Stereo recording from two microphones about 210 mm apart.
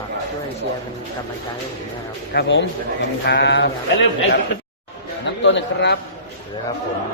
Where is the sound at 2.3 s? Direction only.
60° left (ahead or behind).